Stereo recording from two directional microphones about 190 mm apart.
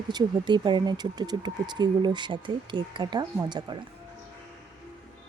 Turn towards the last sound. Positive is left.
turn(degrees=-25)  # may be behind; listen again after turning